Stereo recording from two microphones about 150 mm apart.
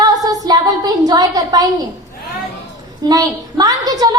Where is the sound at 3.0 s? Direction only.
25° right (ahead or behind).